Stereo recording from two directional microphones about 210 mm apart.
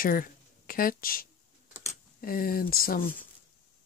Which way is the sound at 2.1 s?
45° left (ahead or behind).